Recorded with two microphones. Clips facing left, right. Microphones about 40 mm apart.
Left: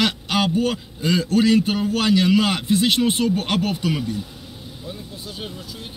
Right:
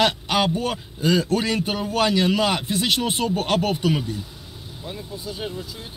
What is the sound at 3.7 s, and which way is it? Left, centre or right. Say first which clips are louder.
Speech: right 1 dB; right.